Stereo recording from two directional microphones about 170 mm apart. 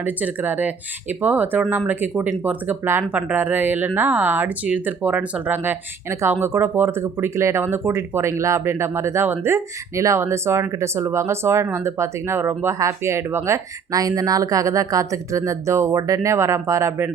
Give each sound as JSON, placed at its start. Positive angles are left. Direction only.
{"t": 0.0, "sound": "speech", "side_deg": -10}